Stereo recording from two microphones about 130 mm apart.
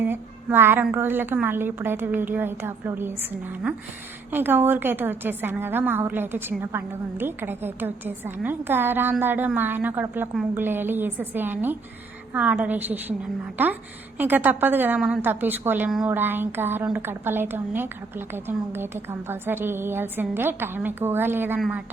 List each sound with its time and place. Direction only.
0.0 s a woman's voice: 15° right (ahead or behind)
4.3 s a woman's voice: 15° right (ahead or behind)